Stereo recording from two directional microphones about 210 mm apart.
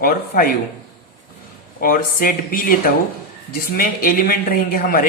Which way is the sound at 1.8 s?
45° left (ahead or behind).